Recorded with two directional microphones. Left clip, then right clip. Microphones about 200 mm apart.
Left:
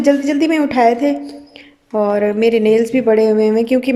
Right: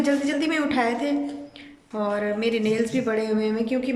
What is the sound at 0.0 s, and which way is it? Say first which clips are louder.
Speech: left 9 dB; 30° left (ahead or behind).